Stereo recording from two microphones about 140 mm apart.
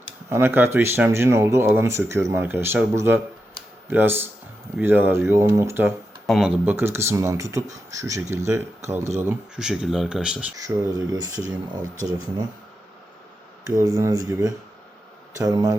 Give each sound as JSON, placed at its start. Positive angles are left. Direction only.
{"t": 0.3, "sound": "speech", "side_deg": -15}
{"t": 6.2, "sound": "speech", "side_deg": 0}
{"t": 6.7, "sound": "speech", "side_deg": -20}
{"t": 9.6, "sound": "speech", "side_deg": -5}
{"t": 10.6, "sound": "speech", "side_deg": -25}
{"t": 13.7, "sound": "speech", "side_deg": -25}